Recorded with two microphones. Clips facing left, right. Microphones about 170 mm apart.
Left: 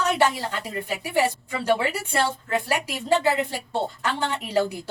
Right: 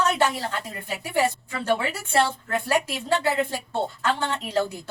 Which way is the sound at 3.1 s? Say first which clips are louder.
Left 2 dB; 15° left (ahead or behind).